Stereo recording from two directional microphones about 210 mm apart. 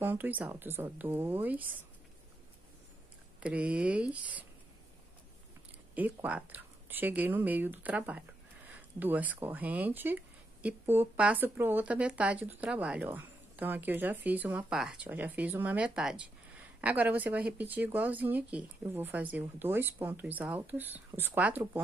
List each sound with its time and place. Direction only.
0.0 s speech: 10° right (ahead or behind)
3.3 s speech: 5° right (ahead or behind)
5.9 s speech: 5° right (ahead or behind)